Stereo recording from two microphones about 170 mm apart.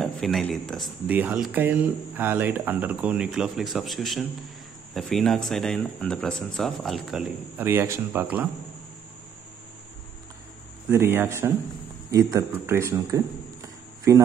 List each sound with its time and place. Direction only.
0.0 s a man's voice: centre (ahead or behind)
10.9 s speech: 15° right (ahead or behind)